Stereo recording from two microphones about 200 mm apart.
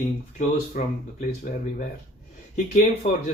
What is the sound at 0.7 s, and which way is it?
Speech, 40° left (ahead or behind).